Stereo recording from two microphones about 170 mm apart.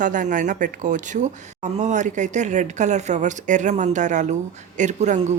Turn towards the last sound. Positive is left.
turn(degrees=-45)  # may be behind; listen again after turning